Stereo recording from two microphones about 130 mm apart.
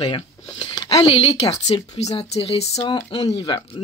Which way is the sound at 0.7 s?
30° left (ahead or behind).